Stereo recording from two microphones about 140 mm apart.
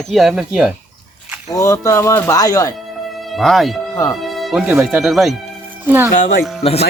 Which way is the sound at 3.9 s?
25° left (ahead or behind).